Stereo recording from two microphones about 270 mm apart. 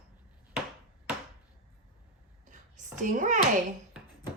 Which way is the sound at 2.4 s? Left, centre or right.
Right.